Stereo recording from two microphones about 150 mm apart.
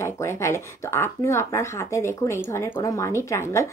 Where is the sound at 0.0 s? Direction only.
20° left (ahead or behind).